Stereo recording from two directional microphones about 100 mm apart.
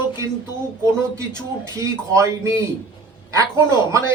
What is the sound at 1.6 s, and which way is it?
Speech, 30° right (ahead or behind).